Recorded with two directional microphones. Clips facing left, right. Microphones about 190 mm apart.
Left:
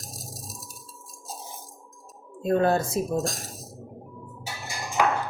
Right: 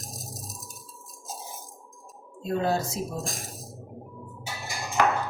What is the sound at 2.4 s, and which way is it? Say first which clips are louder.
Speech: left 4 dB; 55° left (ahead or behind).